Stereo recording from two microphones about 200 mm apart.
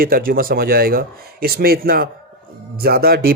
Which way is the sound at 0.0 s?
45° right (ahead or behind).